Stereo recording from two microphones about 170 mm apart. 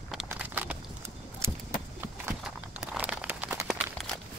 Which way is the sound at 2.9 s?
5° right (ahead or behind).